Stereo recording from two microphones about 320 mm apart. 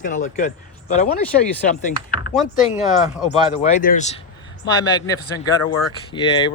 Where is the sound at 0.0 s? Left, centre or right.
Left.